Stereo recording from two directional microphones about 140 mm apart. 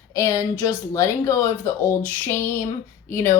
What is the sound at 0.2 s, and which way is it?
Speech, 25° left (ahead or behind).